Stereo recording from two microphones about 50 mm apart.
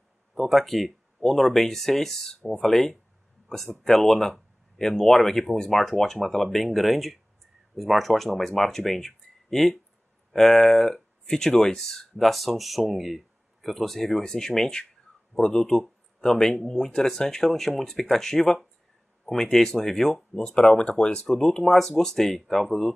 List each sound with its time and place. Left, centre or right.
0.3 s speech: centre
20.4 s speech: centre